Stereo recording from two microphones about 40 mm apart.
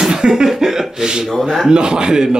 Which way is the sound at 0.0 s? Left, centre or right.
Centre.